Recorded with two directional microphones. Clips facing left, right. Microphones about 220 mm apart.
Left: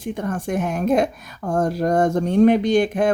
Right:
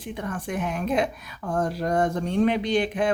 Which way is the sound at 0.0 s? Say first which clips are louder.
Left 6 dB; 45° left (ahead or behind).